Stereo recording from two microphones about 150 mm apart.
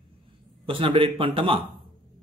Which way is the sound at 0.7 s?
35° right (ahead or behind).